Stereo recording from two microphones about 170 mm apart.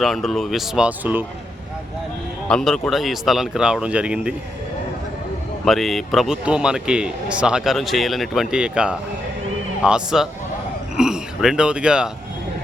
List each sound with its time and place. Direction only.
0.0 s a man's voice: centre (ahead or behind)
2.5 s a man's voice: 5° left (ahead or behind)
5.6 s a man's voice: centre (ahead or behind)